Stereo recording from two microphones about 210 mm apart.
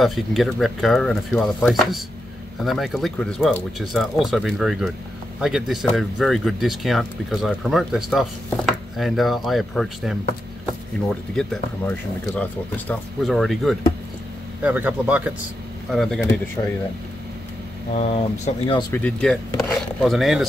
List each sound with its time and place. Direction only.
0.0 s speech: centre (ahead or behind)
16.6 s speech: 15° left (ahead or behind)
17.9 s speech: 30° left (ahead or behind)
18.9 s speech: 5° left (ahead or behind)